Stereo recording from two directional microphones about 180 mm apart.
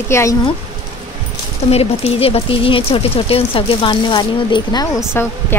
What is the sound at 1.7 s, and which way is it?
Speech, 35° left (ahead or behind).